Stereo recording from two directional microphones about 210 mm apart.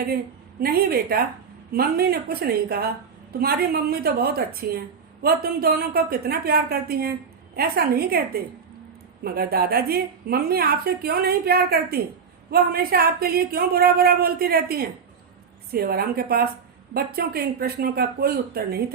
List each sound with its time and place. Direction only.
0.6 s a woman's voice: 45° right (ahead or behind)